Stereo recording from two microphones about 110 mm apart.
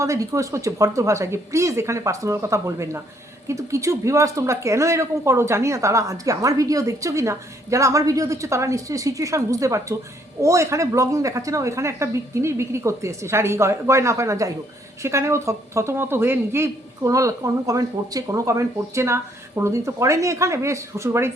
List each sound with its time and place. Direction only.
0.0 s speech: 30° right (ahead or behind)